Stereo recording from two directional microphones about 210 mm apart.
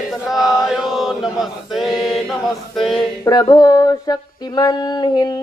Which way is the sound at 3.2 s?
20° left (ahead or behind).